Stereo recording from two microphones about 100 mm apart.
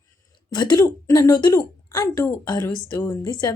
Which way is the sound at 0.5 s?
45° left (ahead or behind).